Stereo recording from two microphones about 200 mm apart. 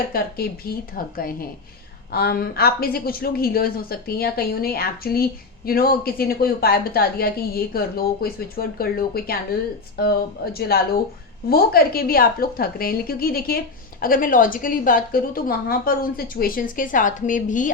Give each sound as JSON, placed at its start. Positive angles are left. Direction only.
{"t": 0.1, "sound": "speech", "side_deg": 50}